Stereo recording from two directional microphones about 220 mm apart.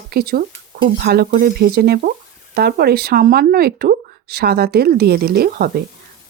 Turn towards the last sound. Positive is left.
turn(degrees=-45)  # may be behind; listen again after turning